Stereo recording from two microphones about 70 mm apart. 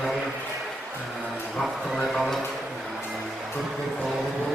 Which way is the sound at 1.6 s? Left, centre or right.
Centre.